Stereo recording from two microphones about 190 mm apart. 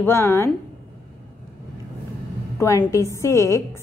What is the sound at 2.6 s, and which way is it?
A woman's voice, 15° left (ahead or behind).